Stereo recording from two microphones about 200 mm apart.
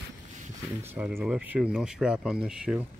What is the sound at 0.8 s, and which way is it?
Speech, 10° right (ahead or behind).